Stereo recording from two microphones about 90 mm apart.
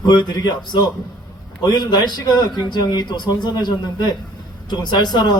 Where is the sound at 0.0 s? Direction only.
55° left (ahead or behind).